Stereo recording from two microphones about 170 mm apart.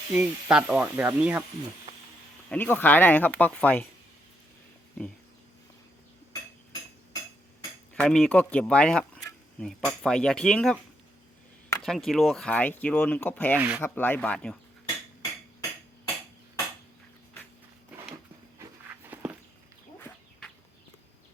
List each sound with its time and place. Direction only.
0.1 s speech: 5° right (ahead or behind)
2.5 s speech: 10° left (ahead or behind)
7.9 s speech: 5° left (ahead or behind)
11.8 s speech: centre (ahead or behind)
13.6 s speech: 10° right (ahead or behind)
13.8 s speech: 10° left (ahead or behind)
19.0 s walk: 10° right (ahead or behind)